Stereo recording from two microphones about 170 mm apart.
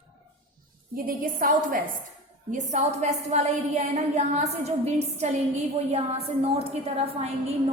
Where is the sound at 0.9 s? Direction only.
55° right (ahead or behind).